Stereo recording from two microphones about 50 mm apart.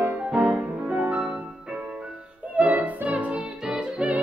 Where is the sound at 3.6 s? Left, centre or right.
Centre.